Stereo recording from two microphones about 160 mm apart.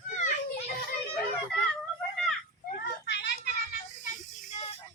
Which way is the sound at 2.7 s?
90° left.